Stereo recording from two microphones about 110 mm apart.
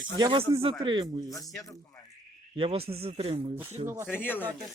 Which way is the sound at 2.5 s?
60° right (ahead or behind).